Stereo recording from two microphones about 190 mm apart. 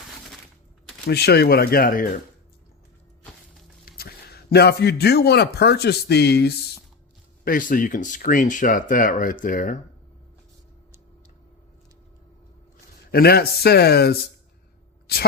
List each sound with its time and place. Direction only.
1.0 s speech: 55° left (ahead or behind)
3.8 s speech: 55° left (ahead or behind)
7.4 s speech: 45° left (ahead or behind)
13.1 s speech: 55° left (ahead or behind)